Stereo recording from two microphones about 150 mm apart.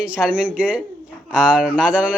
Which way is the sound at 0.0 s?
10° right (ahead or behind).